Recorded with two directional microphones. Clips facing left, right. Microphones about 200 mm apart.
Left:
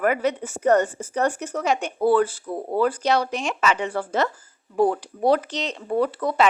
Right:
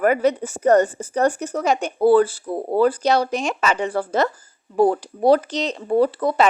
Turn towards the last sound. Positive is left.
turn(degrees=-35)  # may be behind; listen again after turning